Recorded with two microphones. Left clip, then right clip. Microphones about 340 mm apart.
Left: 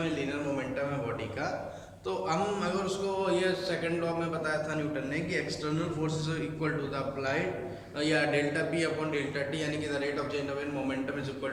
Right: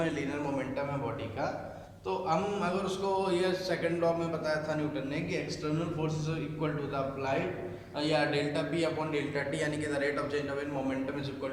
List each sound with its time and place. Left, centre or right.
2.0 s a man's voice: centre
6.6 s a man's voice: centre